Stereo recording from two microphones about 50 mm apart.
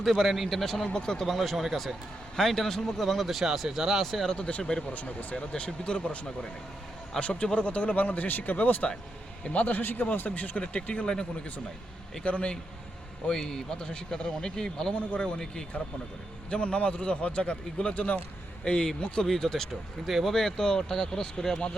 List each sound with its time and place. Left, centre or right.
0.0 s speech: centre
0.9 s speech: centre
1.2 s speech: centre
4.0 s speech: centre
4.4 s a man's voice: left
7.2 s a man's voice: left
12.2 s a man's voice: left
13.2 s a man's voice: centre
16.5 s a man's voice: left